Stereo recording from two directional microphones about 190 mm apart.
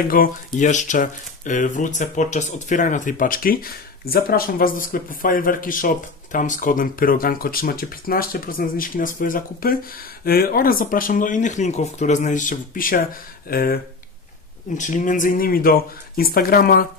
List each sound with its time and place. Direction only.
0.2 s speech: 50° left (ahead or behind)
14.8 s speech: 40° left (ahead or behind)